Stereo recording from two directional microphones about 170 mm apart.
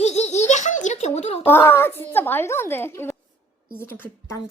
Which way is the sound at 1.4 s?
10° left (ahead or behind).